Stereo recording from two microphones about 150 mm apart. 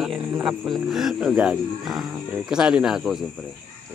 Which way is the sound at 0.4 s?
Centre (ahead or behind).